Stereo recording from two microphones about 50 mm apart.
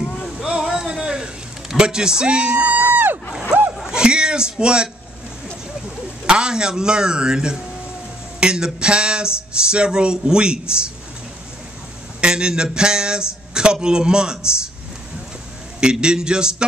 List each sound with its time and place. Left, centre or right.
0.4 s a sound: centre
2.7 s a sound: right
3.9 s a man's voice: centre
6.2 s speech: centre
12.2 s speech: centre
15.8 s speech: centre